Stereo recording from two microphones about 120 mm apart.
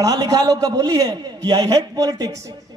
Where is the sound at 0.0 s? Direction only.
30° right (ahead or behind).